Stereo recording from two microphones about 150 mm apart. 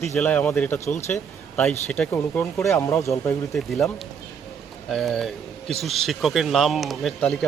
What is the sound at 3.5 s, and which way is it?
Speech, centre (ahead or behind).